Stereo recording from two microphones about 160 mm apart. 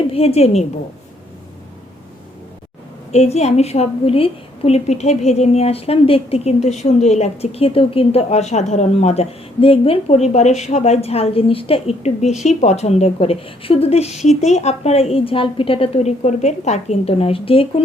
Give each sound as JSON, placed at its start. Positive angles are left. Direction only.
{"t": 0.1, "sound": "a woman's voice", "side_deg": 40}
{"t": 3.1, "sound": "a woman's voice", "side_deg": 40}